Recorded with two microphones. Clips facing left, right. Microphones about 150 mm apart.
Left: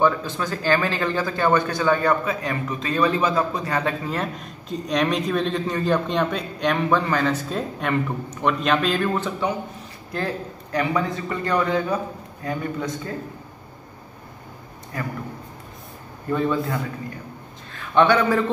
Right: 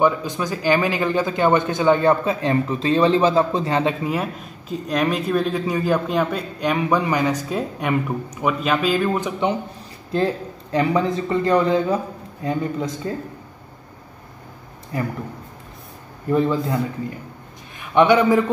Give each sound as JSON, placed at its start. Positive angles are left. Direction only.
{"t": 0.0, "sound": "a man's voice", "side_deg": -15}
{"t": 10.1, "sound": "speech", "side_deg": -25}
{"t": 16.3, "sound": "speech", "side_deg": -25}